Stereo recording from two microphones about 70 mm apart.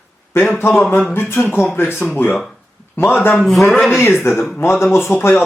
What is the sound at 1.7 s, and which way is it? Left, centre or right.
Speech, left.